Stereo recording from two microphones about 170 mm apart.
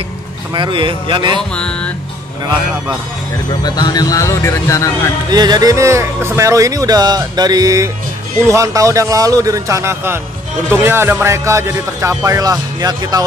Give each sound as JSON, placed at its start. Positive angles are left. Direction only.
{"t": 0.6, "sound": "speech", "side_deg": -30}
{"t": 1.5, "sound": "music", "side_deg": 5}
{"t": 3.6, "sound": "speech", "side_deg": 25}
{"t": 5.3, "sound": "a man's voice", "side_deg": -25}